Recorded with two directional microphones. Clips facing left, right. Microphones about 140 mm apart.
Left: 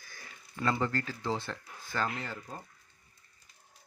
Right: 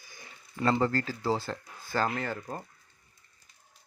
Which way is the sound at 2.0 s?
55° right (ahead or behind).